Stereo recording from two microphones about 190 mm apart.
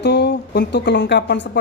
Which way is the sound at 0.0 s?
65° left (ahead or behind).